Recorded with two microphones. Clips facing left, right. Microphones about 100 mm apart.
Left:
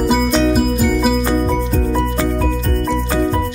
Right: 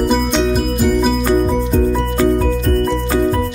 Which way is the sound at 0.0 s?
5° left (ahead or behind).